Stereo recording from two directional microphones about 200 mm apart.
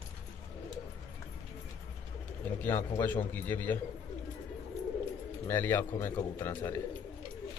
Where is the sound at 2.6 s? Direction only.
10° left (ahead or behind).